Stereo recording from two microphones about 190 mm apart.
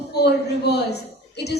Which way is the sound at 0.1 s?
60° left (ahead or behind).